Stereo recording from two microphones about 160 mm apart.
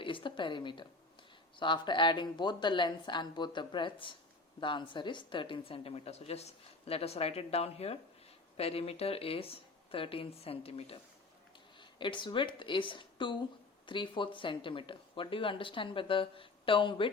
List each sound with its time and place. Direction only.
0.0 s a woman's voice: 30° left (ahead or behind)